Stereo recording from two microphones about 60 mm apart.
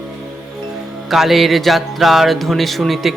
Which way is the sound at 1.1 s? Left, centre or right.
Centre.